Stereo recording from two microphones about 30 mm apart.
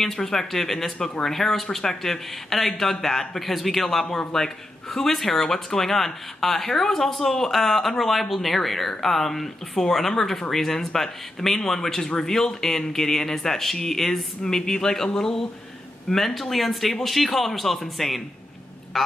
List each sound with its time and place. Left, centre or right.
0.0 s speech: centre
16.1 s speech: centre